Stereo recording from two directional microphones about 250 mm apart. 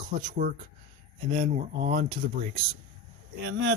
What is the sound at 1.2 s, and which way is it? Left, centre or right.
Speech, right.